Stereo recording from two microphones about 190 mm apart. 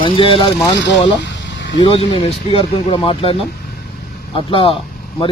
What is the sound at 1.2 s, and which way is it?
Vehicle, 70° left (ahead or behind).